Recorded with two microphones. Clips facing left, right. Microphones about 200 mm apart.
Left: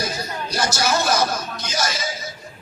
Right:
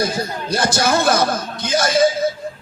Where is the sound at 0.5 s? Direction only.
55° right (ahead or behind).